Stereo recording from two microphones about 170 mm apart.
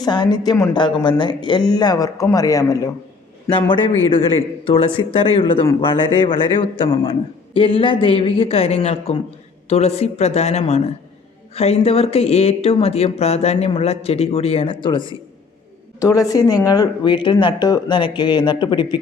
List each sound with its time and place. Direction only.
0.0 s speech: 25° left (ahead or behind)